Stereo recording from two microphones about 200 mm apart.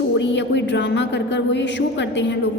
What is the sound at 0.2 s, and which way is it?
A woman's voice, 65° left (ahead or behind).